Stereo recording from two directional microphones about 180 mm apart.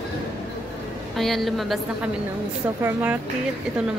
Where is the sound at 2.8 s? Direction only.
10° right (ahead or behind).